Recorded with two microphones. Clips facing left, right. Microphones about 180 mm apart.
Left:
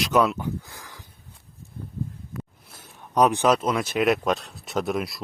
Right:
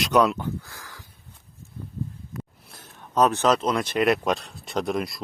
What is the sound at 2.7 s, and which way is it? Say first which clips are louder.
Speech: even; 10° left (ahead or behind).